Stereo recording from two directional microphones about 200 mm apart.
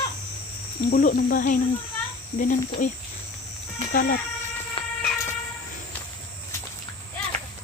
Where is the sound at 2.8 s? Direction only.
40° left (ahead or behind).